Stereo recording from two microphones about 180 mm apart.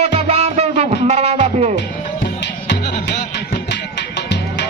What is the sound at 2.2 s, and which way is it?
Music, 70° left (ahead or behind).